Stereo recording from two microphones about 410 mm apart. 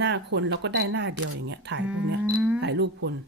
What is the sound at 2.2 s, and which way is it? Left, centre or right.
Speech, centre.